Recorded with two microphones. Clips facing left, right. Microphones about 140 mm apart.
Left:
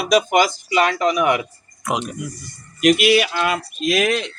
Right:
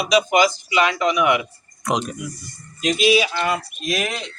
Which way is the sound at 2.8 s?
70° left (ahead or behind).